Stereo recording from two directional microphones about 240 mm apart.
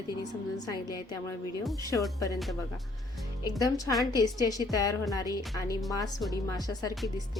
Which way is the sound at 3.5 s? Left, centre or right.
Centre.